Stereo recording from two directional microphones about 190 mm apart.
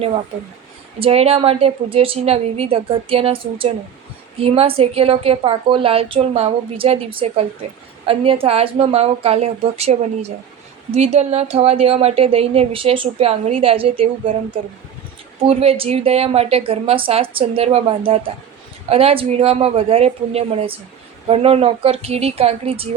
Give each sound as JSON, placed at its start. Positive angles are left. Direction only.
{"t": 0.9, "sound": "a woman's voice", "side_deg": -30}